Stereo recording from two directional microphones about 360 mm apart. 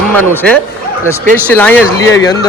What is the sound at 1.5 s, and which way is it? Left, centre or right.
Speech, centre.